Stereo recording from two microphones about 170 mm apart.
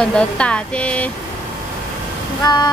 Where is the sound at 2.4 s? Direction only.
25° left (ahead or behind).